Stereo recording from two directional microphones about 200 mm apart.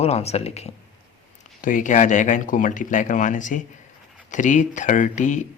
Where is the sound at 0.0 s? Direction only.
30° left (ahead or behind).